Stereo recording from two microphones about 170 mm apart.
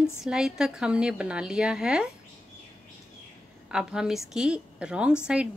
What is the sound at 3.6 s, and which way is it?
A woman's voice, 5° right (ahead or behind).